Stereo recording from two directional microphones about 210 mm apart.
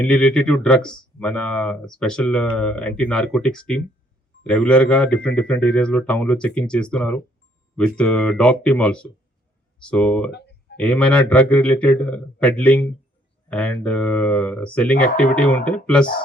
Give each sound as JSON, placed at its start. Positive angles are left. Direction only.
{"t": 0.0, "sound": "a man's voice", "side_deg": 5}
{"t": 10.3, "sound": "a sound", "side_deg": 55}
{"t": 10.8, "sound": "a man's voice", "side_deg": 5}